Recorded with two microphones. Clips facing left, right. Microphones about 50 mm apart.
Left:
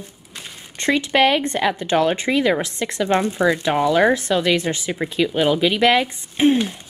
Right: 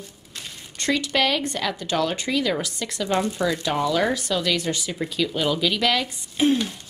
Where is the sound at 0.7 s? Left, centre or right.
Left.